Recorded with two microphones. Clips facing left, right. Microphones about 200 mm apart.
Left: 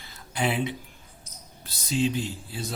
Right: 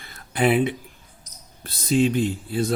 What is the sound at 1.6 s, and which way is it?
Speech, 55° right (ahead or behind).